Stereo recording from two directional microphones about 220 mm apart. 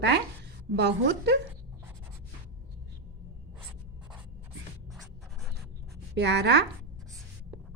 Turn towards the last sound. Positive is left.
turn(degrees=-50)  # may be behind; listen again after turning